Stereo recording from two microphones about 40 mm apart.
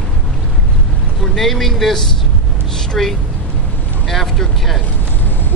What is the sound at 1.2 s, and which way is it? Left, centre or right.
Speech, centre.